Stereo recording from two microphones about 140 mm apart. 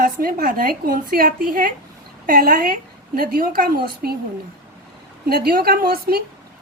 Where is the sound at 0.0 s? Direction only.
90° right.